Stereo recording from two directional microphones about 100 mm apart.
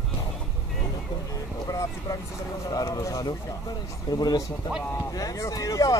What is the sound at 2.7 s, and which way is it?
Speech, 35° left (ahead or behind).